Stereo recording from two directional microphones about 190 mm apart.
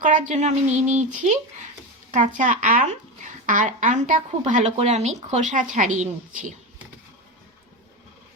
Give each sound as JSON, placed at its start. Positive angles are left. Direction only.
{"t": 0.0, "sound": "speech", "side_deg": -45}